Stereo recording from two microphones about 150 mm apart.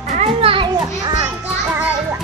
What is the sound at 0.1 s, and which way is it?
Children playing, 45° right (ahead or behind).